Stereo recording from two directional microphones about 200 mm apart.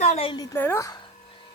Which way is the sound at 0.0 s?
30° left (ahead or behind).